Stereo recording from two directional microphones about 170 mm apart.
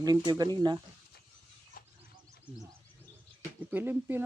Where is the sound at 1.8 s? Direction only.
55° left (ahead or behind).